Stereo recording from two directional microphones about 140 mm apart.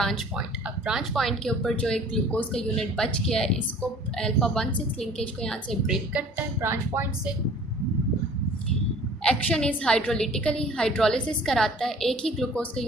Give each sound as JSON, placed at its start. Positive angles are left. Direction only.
{"t": 0.0, "sound": "a woman's voice", "side_deg": 0}
{"t": 6.1, "sound": "a woman's voice", "side_deg": -15}
{"t": 9.2, "sound": "a woman's voice", "side_deg": 5}